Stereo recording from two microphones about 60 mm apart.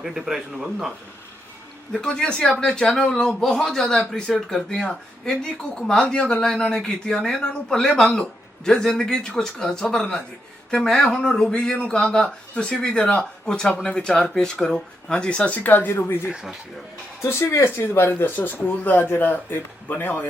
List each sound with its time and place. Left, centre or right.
0.0 s a man's voice: centre
1.9 s speech: centre; by 16.1 s left
16.2 s speech: centre
17.2 s speech: left